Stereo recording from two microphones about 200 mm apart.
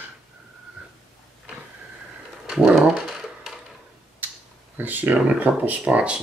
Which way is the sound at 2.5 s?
5° right (ahead or behind).